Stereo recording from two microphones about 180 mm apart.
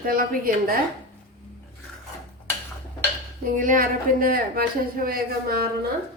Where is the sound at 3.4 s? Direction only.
50° right (ahead or behind).